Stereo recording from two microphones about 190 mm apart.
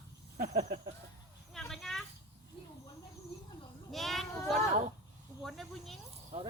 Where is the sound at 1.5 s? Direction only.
Centre (ahead or behind).